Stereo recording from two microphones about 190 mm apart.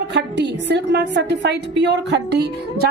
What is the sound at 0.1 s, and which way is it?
A woman's voice, 65° right (ahead or behind).